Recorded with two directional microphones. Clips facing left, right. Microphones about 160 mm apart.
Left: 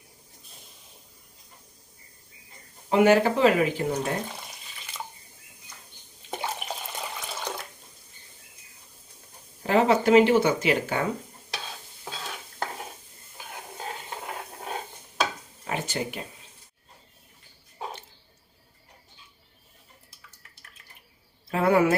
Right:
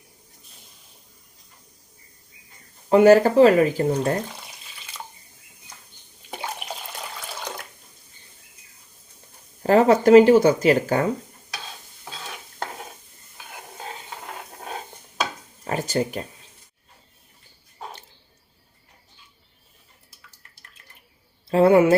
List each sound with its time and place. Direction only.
2.9 s speech: 40° right (ahead or behind)
9.6 s speech: 40° right (ahead or behind)
15.6 s a sound: 40° right (ahead or behind)
21.5 s speech: 30° right (ahead or behind)